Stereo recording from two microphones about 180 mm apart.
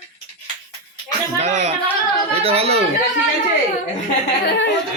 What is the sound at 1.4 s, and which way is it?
Speech, 40° right (ahead or behind).